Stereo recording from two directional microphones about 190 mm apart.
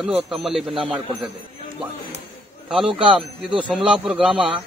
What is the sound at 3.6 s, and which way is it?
Speech, 5° right (ahead or behind).